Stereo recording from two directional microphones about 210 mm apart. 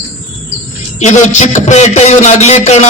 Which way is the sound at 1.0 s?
35° left (ahead or behind).